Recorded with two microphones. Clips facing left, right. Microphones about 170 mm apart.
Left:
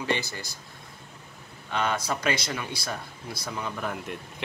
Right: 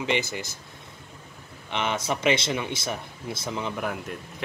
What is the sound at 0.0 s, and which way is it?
Speech, 20° right (ahead or behind).